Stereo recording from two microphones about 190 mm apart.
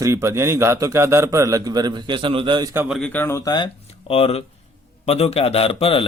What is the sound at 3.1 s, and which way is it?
Speech, 10° left (ahead or behind).